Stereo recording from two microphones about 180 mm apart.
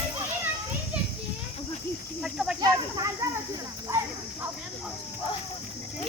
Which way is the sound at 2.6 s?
20° right (ahead or behind).